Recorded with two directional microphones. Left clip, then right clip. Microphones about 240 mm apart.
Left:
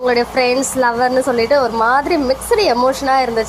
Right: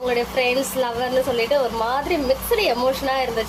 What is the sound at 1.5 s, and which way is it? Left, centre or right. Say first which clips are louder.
A woman's voice: left 7 dB; left.